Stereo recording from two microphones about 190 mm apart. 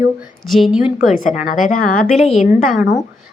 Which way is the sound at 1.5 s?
45° left (ahead or behind).